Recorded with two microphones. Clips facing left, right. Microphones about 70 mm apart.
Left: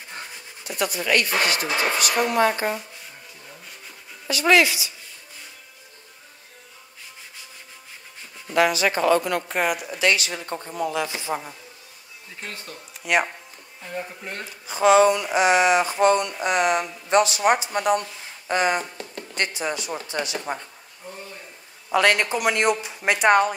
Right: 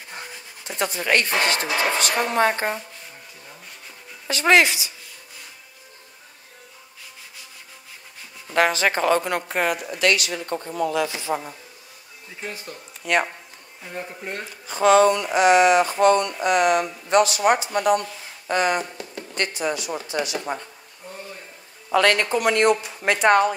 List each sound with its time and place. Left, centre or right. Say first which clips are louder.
0.7 s speech: right 1 dB; right
4.3 s speech: right 1 dB; right
8.5 s speech: even; right
9.5 s speech: right 2 dB; centre
9.8 s speech: right 1 dB; centre
12.4 s speech: right 3 dB; centre
13.0 s speech: even; centre
14.7 s speech: even; centre
20.2 s speech: right 2 dB; left
21.9 s speech: right 1 dB; centre